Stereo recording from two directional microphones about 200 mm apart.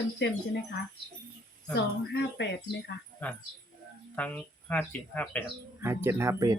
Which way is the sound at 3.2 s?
5° left (ahead or behind).